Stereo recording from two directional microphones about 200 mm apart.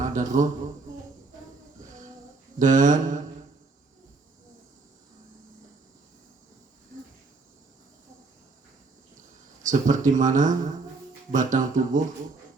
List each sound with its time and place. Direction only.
0.0 s a sound: 40° right (ahead or behind)
2.6 s speech: 40° right (ahead or behind)
9.6 s speech: 40° right (ahead or behind)